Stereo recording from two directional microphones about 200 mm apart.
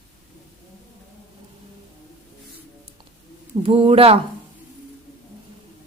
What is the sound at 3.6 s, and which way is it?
Speech, 25° right (ahead or behind).